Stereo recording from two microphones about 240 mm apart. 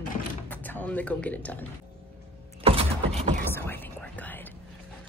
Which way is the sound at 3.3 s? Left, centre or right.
Centre.